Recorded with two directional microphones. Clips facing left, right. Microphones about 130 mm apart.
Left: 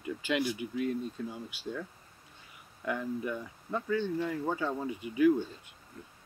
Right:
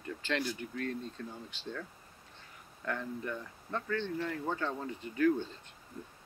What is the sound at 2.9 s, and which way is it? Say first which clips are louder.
Speech: left 4 dB; 10° left (ahead or behind).